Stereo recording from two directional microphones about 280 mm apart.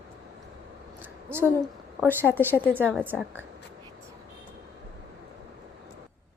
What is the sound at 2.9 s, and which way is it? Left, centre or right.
Speech, centre.